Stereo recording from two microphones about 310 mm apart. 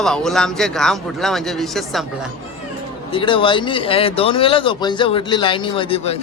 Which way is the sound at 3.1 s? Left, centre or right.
Centre.